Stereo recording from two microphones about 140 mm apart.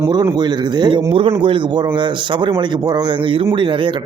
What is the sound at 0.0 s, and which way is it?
A man's voice, 25° right (ahead or behind).